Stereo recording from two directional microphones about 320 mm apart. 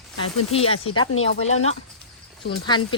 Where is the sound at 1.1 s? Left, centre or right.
Left.